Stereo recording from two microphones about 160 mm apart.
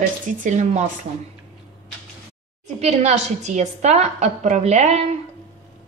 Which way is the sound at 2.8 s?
45° right (ahead or behind).